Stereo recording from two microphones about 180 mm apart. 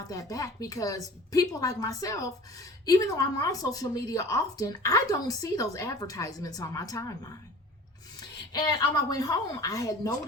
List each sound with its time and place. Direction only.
0.1 s a woman's voice: 20° left (ahead or behind)
8.5 s a woman's voice: 20° left (ahead or behind)